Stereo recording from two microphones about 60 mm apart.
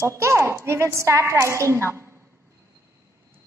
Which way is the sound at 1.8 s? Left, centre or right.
Right.